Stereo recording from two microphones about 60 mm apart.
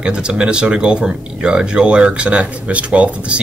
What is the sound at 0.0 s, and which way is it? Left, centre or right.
Speech, centre.